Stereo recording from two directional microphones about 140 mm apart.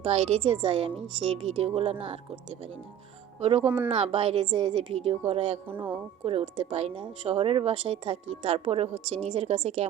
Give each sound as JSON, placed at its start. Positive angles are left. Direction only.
{"t": 0.0, "sound": "speech", "side_deg": -45}
{"t": 3.4, "sound": "speech", "side_deg": -45}
{"t": 5.6, "sound": "speech", "side_deg": -15}
{"t": 6.2, "sound": "speech", "side_deg": -50}